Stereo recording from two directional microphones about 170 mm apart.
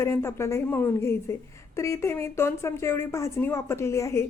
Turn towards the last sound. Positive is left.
turn(degrees=15)  # may be behind; listen again after turning